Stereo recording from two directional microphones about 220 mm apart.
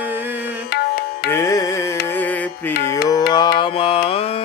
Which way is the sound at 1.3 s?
15° left (ahead or behind).